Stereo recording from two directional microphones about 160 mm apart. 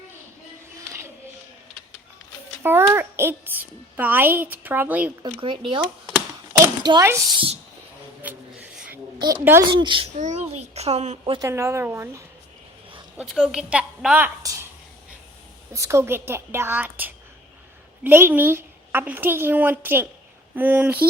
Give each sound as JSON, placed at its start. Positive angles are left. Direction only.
{"t": 2.6, "sound": "a child's voice", "side_deg": -15}
{"t": 5.2, "sound": "speech", "side_deg": -30}
{"t": 6.5, "sound": "a sound", "side_deg": -25}
{"t": 7.3, "sound": "speech", "side_deg": -35}
{"t": 8.2, "sound": "a sound", "side_deg": -10}
{"t": 9.1, "sound": "a woman's voice", "side_deg": -25}
{"t": 9.4, "sound": "a child's voice", "side_deg": -15}
{"t": 9.8, "sound": "speech", "side_deg": -30}
{"t": 10.2, "sound": "a child's voice", "side_deg": -45}
{"t": 11.3, "sound": "a child's voice", "side_deg": -15}
{"t": 13.1, "sound": "a woman's voice", "side_deg": -5}
{"t": 14.4, "sound": "a sound", "side_deg": -20}
{"t": 15.7, "sound": "a child's voice", "side_deg": -20}